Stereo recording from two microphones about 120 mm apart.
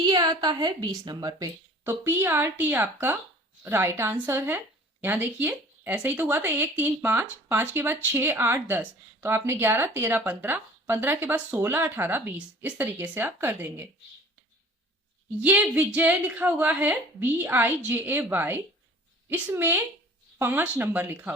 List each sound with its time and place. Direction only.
0.0 s a woman's voice: 35° right (ahead or behind)
1.8 s speech: 20° right (ahead or behind)
15.4 s speech: 15° right (ahead or behind)